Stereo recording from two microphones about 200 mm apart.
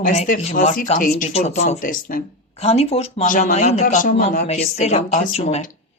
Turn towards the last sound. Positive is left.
turn(degrees=30)  # may be behind; listen again after turning